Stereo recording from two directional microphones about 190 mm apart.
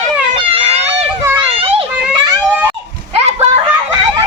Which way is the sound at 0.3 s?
30° right (ahead or behind).